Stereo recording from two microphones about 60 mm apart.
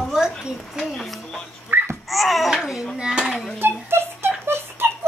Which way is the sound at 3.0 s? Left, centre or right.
Centre.